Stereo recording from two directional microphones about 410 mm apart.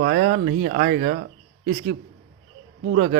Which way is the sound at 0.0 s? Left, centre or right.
Right.